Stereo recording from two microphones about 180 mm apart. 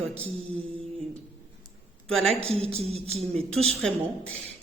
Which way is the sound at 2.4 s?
35° right (ahead or behind).